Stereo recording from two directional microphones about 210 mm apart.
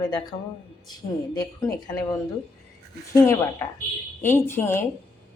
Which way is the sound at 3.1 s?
10° left (ahead or behind).